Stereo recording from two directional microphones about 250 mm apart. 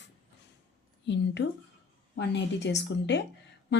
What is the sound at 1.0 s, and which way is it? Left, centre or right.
A woman's voice, left.